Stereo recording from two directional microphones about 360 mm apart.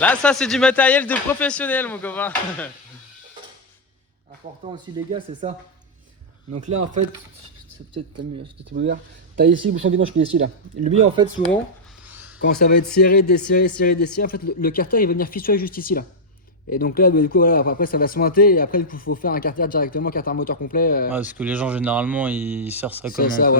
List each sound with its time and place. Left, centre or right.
0.0 s speech: centre
4.6 s speech: centre
8.7 s speech: right
10.4 s speech: centre
12.4 s speech: left
21.1 s speech: centre
23.1 s speech: left